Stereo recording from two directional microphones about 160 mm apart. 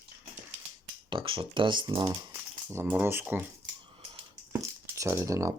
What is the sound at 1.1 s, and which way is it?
Speech, 35° right (ahead or behind).